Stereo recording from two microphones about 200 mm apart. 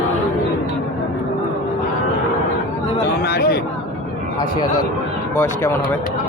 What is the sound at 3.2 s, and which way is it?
Speech, 55° left (ahead or behind).